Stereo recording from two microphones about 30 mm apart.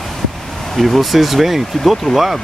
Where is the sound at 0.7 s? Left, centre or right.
Centre.